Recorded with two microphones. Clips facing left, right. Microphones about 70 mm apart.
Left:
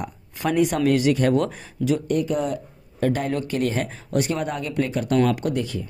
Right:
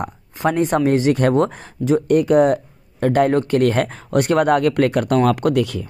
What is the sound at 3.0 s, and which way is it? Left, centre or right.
Speech, right.